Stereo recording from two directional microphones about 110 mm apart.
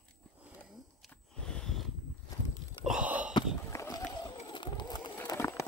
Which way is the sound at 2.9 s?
10° right (ahead or behind).